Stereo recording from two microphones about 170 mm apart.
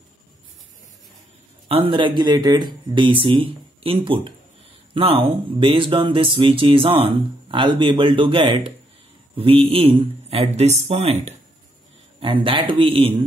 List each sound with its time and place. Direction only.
1.7 s speech: 30° right (ahead or behind)